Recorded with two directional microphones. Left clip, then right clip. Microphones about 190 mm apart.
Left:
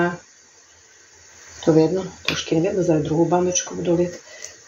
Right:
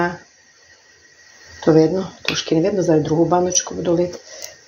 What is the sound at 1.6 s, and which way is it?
Speech, 30° right (ahead or behind).